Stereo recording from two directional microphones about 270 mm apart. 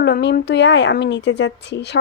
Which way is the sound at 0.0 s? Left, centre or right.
Left.